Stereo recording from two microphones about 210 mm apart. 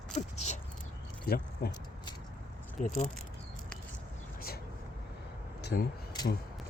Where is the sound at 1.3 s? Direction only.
45° left (ahead or behind).